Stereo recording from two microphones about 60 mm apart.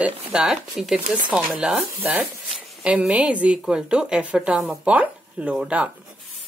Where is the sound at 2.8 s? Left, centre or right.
Centre.